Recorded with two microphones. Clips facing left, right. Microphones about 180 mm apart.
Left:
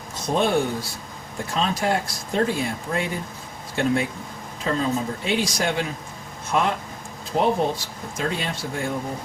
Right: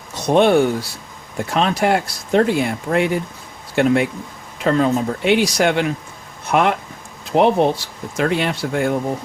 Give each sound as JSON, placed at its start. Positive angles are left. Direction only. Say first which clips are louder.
{"t": 0.2, "sound": "speech", "louder": "right 8 dB", "side_deg": -70}